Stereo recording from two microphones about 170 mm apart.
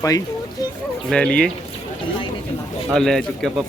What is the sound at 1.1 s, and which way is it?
Speech, 5° left (ahead or behind).